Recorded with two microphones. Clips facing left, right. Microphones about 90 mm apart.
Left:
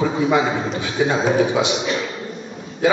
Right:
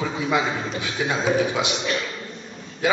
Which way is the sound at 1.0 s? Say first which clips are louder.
Left 7 dB; 30° left (ahead or behind).